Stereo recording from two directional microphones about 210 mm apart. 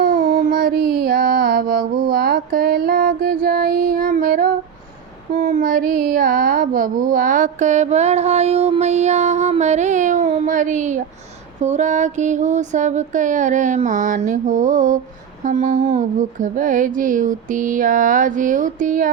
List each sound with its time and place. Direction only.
0.5 s music: 50° right (ahead or behind)
3.2 s female singing: 45° right (ahead or behind)
5.3 s a sound: 40° right (ahead or behind)